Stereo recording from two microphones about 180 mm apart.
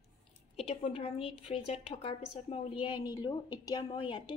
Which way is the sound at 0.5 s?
35° left (ahead or behind).